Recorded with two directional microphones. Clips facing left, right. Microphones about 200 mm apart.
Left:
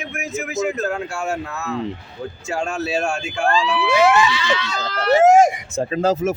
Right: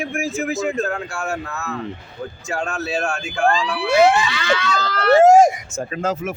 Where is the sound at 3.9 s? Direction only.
35° right (ahead or behind).